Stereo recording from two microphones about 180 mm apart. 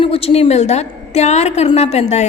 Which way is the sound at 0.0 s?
35° left (ahead or behind).